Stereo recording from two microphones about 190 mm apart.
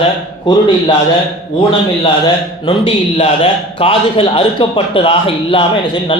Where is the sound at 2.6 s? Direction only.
25° left (ahead or behind).